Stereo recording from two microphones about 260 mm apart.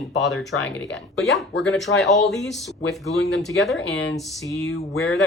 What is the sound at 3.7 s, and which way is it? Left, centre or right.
Speech, left.